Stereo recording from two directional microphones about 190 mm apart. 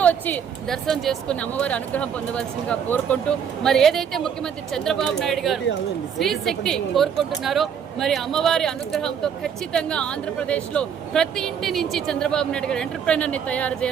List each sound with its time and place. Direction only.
0.0 s a woman's voice: 10° left (ahead or behind)